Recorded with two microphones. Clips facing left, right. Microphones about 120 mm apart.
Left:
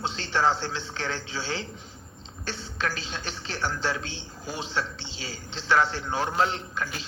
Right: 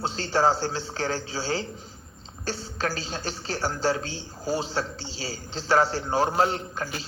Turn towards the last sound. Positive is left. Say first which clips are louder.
# right 2 dB
turn(degrees=-40)  # may be behind; listen again after turning